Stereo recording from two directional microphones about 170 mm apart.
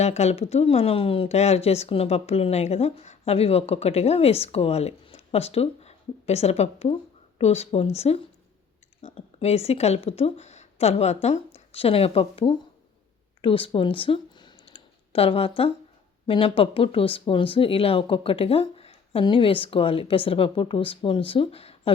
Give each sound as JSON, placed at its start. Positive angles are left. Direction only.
{"t": 0.0, "sound": "speech", "side_deg": 40}
{"t": 13.4, "sound": "clicking", "side_deg": 30}
{"t": 16.2, "sound": "speech", "side_deg": 30}